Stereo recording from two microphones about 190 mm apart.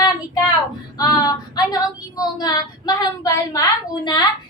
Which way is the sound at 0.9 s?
20° left (ahead or behind).